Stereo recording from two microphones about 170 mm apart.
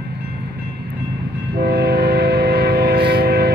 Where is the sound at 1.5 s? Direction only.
70° right (ahead or behind).